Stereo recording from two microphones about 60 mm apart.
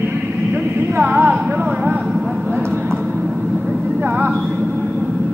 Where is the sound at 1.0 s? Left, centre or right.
Right.